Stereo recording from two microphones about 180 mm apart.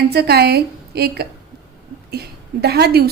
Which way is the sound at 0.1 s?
60° right (ahead or behind).